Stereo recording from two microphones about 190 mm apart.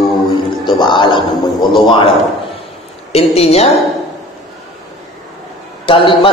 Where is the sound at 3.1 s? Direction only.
35° left (ahead or behind).